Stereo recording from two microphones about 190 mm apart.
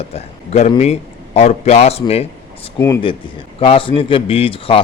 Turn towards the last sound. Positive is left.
turn(degrees=30)  # may be behind; listen again after turning